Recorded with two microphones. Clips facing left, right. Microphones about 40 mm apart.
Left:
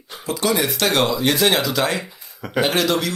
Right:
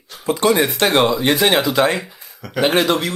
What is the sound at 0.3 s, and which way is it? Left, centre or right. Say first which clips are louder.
Speech: right 5 dB; right.